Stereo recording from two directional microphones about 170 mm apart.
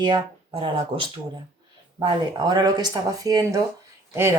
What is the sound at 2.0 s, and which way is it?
Speech, 25° right (ahead or behind).